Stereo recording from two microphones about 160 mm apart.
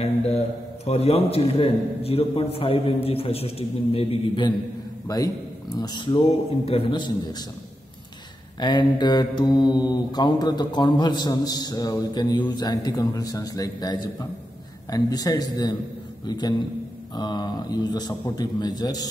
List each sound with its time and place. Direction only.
0.8 s a man's voice: 40° left (ahead or behind)
5.0 s a man's voice: 20° left (ahead or behind)
8.5 s mantra: 25° left (ahead or behind)